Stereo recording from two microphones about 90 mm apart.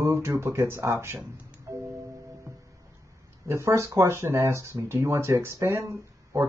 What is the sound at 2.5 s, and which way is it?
Music, 40° right (ahead or behind).